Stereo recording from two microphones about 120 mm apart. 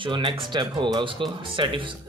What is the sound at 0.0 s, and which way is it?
Speech, 40° right (ahead or behind).